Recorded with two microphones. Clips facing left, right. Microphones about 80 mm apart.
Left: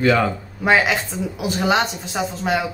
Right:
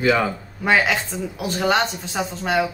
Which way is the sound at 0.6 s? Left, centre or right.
Centre.